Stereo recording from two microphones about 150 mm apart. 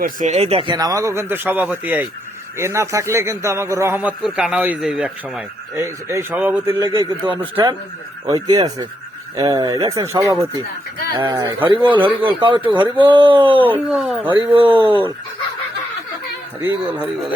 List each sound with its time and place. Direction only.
0.0 s speech: 60° right (ahead or behind)
0.3 s speech: 40° right (ahead or behind)
0.8 s a man's voice: 25° right (ahead or behind); by 5.4 s 5° right (ahead or behind)
5.7 s speech: 20° right (ahead or behind)
6.9 s a man's voice: 35° right (ahead or behind)
13.7 s speech: 10° right (ahead or behind)
14.3 s speech: 35° right (ahead or behind)
16.6 s speech: 10° right (ahead or behind)